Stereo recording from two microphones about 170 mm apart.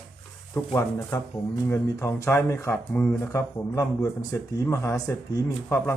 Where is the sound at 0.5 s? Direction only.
20° left (ahead or behind).